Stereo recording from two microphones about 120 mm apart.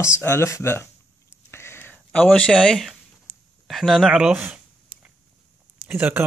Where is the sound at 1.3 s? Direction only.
20° left (ahead or behind); by 3.0 s centre (ahead or behind).